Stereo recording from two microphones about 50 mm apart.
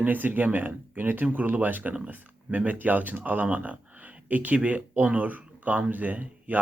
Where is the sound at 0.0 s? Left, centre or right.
Right.